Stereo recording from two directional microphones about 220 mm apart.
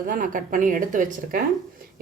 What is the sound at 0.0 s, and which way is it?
A woman's voice, 40° right (ahead or behind).